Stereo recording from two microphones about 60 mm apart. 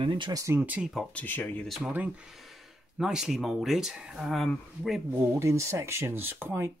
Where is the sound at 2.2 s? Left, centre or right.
Centre.